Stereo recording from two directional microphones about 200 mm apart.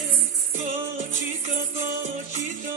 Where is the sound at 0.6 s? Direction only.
40° right (ahead or behind).